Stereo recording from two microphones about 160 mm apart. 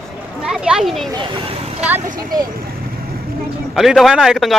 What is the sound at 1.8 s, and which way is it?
Vehicle, 10° right (ahead or behind).